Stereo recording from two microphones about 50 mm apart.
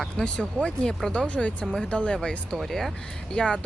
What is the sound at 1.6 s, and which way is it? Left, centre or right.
Speech, centre.